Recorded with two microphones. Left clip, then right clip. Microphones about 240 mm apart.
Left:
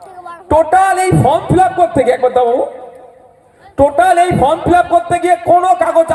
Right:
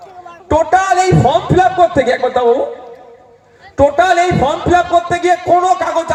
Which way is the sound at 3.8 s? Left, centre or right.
Left.